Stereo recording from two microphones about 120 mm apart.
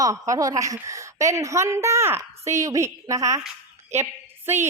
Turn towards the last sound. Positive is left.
turn(degrees=-20)  # may be behind; listen again after turning